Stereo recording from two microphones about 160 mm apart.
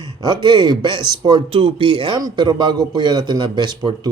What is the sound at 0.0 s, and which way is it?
Speech, 25° right (ahead or behind).